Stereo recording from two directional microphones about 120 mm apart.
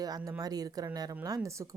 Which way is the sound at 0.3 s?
30° right (ahead or behind).